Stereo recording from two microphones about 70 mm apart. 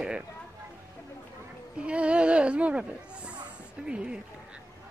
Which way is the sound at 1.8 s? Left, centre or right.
Centre.